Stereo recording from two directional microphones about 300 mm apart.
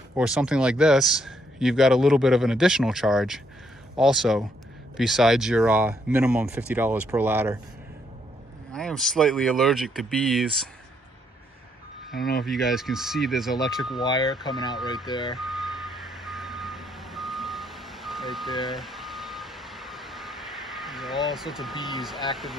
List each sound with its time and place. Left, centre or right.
0.1 s speech: centre
8.7 s speech: centre
12.2 s speech: left
12.4 s speech: centre
14.0 s speech: centre
15.3 s reversing beeps: centre